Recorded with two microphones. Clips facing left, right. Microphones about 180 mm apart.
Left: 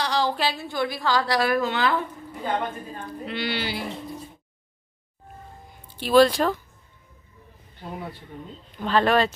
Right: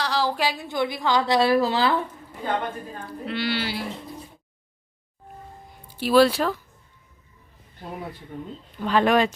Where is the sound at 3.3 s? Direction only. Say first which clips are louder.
Right 2 dB; centre (ahead or behind).